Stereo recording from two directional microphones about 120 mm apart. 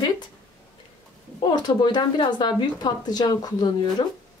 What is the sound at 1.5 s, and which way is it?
Speech, 35° left (ahead or behind).